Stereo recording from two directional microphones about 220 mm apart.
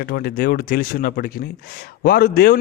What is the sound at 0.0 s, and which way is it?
Speech, 45° left (ahead or behind).